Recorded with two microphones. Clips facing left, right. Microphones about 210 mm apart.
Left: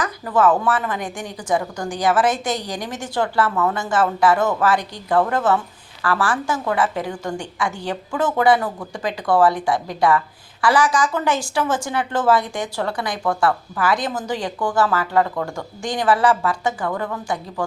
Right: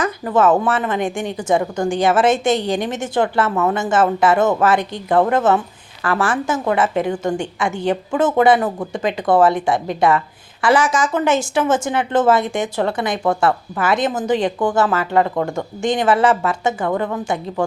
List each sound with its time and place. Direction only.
0.0 s a woman's voice: 25° right (ahead or behind)